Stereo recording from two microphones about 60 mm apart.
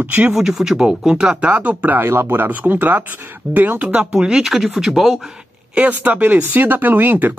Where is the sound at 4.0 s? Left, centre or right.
Centre.